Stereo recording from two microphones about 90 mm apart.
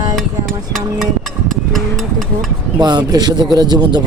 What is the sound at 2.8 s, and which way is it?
A man's voice, 50° right (ahead or behind).